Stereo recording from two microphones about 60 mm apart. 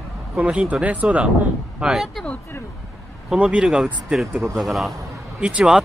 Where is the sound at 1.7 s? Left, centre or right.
Centre.